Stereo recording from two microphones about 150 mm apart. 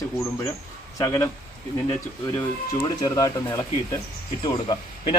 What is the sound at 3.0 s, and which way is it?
A man's voice, 25° left (ahead or behind).